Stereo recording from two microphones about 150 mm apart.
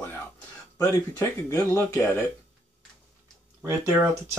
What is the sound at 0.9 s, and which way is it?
Speech, 20° left (ahead or behind).